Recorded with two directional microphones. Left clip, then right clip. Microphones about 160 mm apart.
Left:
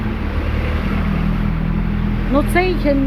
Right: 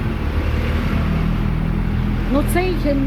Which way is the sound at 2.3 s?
Centre (ahead or behind).